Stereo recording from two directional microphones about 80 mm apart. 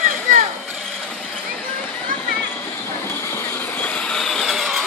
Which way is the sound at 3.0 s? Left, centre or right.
Left.